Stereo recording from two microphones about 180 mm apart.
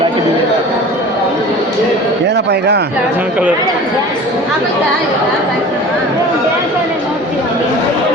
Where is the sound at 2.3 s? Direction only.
70° right (ahead or behind).